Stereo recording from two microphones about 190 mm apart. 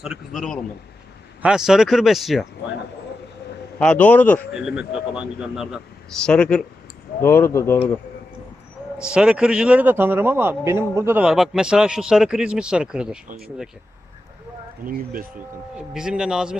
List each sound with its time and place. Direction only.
0.0 s speech: centre (ahead or behind)
3.8 s a man's voice: 5° left (ahead or behind)
4.5 s a man's voice: 5° right (ahead or behind); by 7.8 s 15° left (ahead or behind)
9.0 s speech: 5° right (ahead or behind)
14.8 s speech: 50° right (ahead or behind)
15.7 s speech: 5° right (ahead or behind)